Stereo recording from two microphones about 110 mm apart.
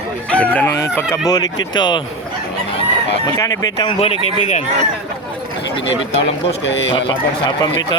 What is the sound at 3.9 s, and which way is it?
Speech, 65° left (ahead or behind).